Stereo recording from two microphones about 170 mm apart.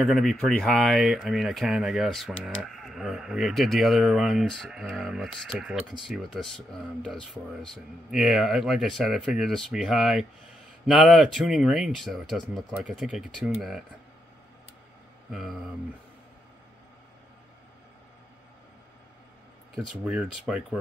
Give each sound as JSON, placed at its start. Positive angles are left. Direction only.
{"t": 0.0, "sound": "speech", "side_deg": 0}
{"t": 15.3, "sound": "speech", "side_deg": 0}
{"t": 19.9, "sound": "speech", "side_deg": -5}